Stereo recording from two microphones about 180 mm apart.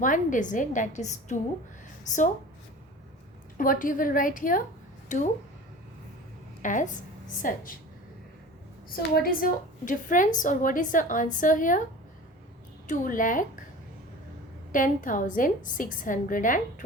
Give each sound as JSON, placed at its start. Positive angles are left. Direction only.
{"t": 0.0, "sound": "a woman's voice", "side_deg": 45}
{"t": 3.6, "sound": "a woman's voice", "side_deg": 50}
{"t": 6.6, "sound": "a woman's voice", "side_deg": 45}
{"t": 9.1, "sound": "a woman's voice", "side_deg": 55}
{"t": 12.9, "sound": "a woman's voice", "side_deg": 45}
{"t": 14.7, "sound": "a woman's voice", "side_deg": 50}